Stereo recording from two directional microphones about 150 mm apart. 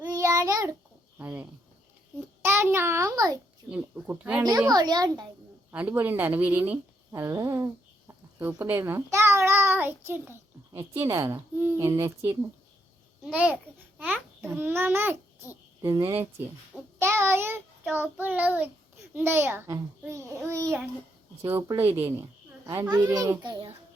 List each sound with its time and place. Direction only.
0.2 s child singing: 20° right (ahead or behind)
1.2 s a child's voice: 10° right (ahead or behind)
3.7 s a child's voice: 10° right (ahead or behind)
4.7 s a child's voice: 25° right (ahead or behind)
5.7 s a child's voice: 10° right (ahead or behind)
7.1 s a sound: 20° right (ahead or behind)
11.0 s a child's voice: 20° right (ahead or behind)
16.0 s a child's voice: 25° right (ahead or behind)